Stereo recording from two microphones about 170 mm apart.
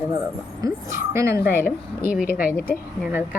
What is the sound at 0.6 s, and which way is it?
Speech, 15° right (ahead or behind).